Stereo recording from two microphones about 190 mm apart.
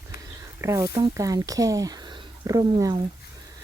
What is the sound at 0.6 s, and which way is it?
Speech, 15° right (ahead or behind).